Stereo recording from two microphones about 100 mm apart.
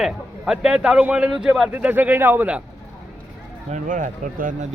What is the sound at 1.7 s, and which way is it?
Speech, 15° right (ahead or behind).